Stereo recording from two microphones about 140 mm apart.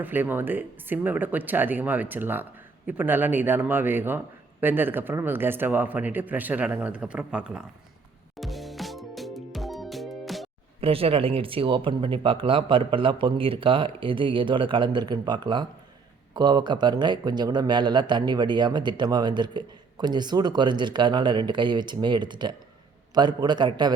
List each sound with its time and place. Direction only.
0.0 s speech: 15° right (ahead or behind)
8.4 s music: centre (ahead or behind)
10.8 s speech: 45° right (ahead or behind)